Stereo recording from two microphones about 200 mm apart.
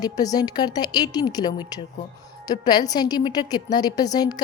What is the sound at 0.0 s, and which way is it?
A woman's voice, 20° left (ahead or behind).